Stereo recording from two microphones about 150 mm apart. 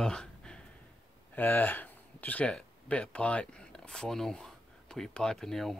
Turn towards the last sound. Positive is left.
turn(degrees=0)  # may be behind; listen again after turning